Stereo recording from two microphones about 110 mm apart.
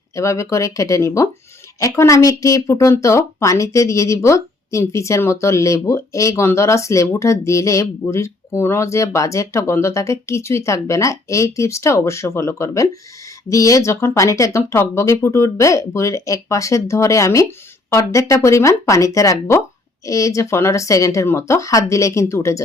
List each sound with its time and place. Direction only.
0.2 s speech: 25° left (ahead or behind)